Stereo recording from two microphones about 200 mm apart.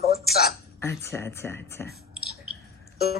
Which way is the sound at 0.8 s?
10° left (ahead or behind).